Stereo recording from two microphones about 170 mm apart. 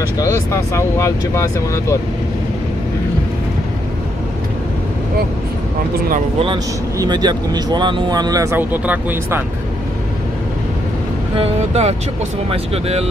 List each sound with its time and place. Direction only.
0.2 s speech: 15° left (ahead or behind)
6.4 s speech: 25° right (ahead or behind); by 9.4 s 10° right (ahead or behind)
11.3 s speech: 40° right (ahead or behind)